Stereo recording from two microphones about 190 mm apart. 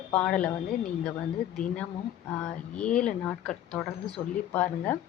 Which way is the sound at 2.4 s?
5° left (ahead or behind).